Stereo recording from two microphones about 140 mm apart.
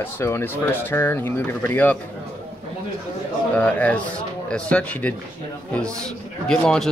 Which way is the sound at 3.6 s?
10° left (ahead or behind).